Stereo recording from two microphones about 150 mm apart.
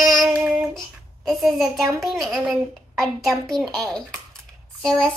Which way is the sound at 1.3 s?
Centre (ahead or behind).